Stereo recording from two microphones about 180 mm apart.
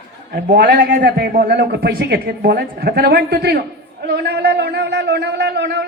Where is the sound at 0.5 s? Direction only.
65° right (ahead or behind).